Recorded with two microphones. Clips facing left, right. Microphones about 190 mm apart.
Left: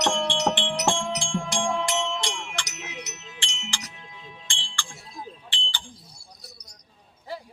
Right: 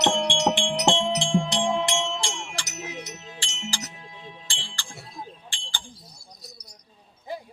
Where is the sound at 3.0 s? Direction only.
45° right (ahead or behind).